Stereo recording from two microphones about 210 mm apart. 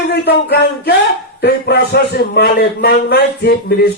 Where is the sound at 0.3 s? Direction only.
50° left (ahead or behind).